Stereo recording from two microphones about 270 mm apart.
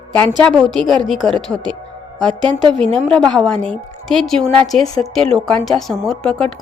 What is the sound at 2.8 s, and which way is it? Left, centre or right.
Speech, right.